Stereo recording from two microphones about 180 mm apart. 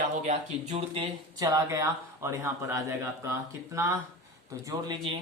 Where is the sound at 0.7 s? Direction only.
25° right (ahead or behind).